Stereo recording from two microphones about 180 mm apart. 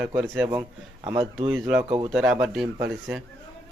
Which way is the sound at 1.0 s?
25° right (ahead or behind).